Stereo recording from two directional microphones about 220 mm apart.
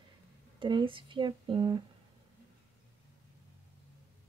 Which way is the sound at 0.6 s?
20° right (ahead or behind).